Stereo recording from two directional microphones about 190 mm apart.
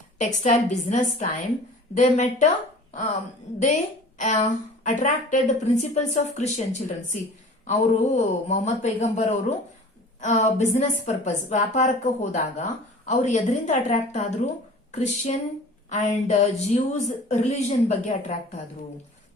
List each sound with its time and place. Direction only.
0.2 s a woman's voice: 40° left (ahead or behind)
4.2 s a woman's voice: 40° left (ahead or behind)